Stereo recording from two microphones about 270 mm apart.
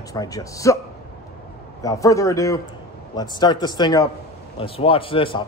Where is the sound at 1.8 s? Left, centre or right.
Centre.